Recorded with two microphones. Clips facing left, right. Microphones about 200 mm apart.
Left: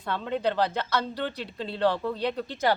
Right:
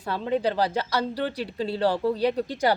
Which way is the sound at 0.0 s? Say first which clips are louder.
Right 3 dB; 10° right (ahead or behind).